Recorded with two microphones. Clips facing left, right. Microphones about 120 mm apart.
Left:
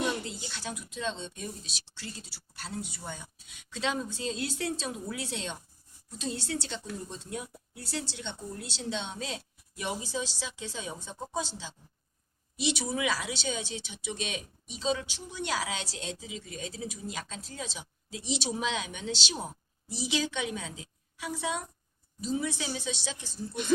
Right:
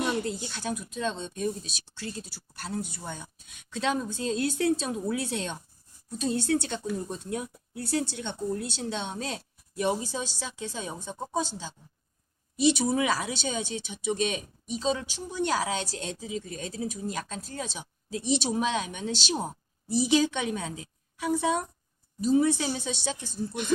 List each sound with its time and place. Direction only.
0.3 s a woman's voice: 50° right (ahead or behind)